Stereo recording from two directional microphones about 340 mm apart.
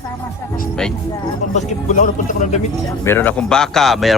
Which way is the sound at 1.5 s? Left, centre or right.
Left.